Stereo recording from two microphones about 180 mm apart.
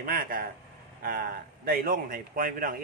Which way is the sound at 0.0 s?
50° right (ahead or behind).